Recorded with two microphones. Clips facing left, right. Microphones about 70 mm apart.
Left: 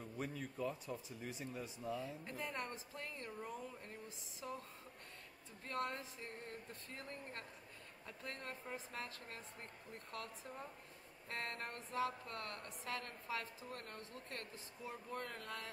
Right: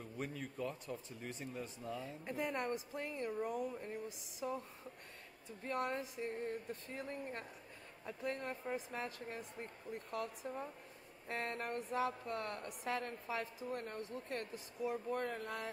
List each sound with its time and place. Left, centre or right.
0.2 s speech: centre
2.2 s a woman's voice: centre
15.1 s a woman's voice: right